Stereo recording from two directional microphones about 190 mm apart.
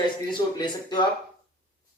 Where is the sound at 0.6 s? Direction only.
25° left (ahead or behind).